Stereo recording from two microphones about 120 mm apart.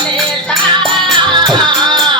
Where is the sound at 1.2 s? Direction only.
40° right (ahead or behind).